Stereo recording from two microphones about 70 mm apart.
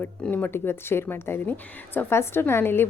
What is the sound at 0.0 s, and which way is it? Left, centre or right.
A woman's voice, left.